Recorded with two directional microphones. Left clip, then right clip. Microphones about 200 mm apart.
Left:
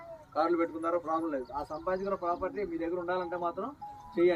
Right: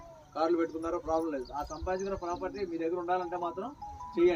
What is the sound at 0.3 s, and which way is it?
A man's voice, 20° left (ahead or behind).